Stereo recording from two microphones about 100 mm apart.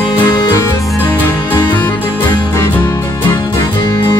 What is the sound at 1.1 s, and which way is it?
Music, 15° left (ahead or behind).